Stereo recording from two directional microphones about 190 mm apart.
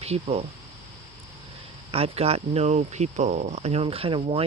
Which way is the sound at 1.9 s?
30° right (ahead or behind).